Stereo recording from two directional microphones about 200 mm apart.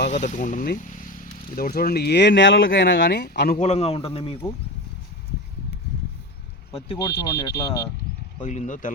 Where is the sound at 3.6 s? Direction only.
35° left (ahead or behind).